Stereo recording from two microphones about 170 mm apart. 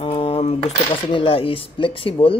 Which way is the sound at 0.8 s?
30° left (ahead or behind).